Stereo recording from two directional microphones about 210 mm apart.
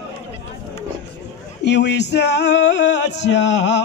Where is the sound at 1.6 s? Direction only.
55° left (ahead or behind).